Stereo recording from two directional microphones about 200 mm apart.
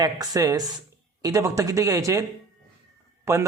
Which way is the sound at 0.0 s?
15° right (ahead or behind).